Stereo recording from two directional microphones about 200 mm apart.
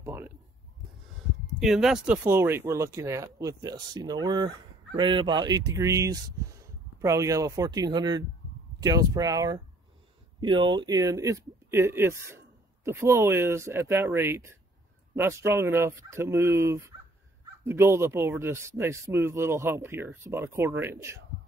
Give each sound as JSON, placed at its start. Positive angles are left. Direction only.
{"t": 0.0, "sound": "speech", "side_deg": -15}
{"t": 1.6, "sound": "speech", "side_deg": 0}